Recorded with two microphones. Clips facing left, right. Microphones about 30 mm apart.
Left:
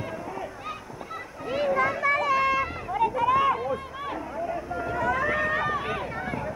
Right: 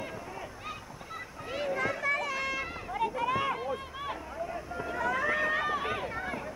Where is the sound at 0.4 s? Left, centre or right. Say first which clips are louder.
Left 6 dB; centre.